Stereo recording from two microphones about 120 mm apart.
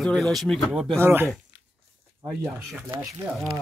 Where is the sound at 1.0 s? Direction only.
20° right (ahead or behind).